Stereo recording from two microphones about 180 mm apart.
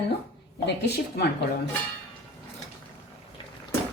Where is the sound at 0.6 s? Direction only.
65° left (ahead or behind).